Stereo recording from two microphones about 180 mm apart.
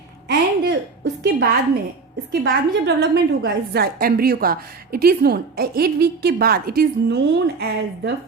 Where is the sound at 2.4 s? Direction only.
75° right (ahead or behind).